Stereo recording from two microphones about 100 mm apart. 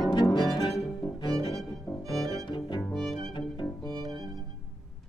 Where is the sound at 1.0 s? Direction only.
50° left (ahead or behind).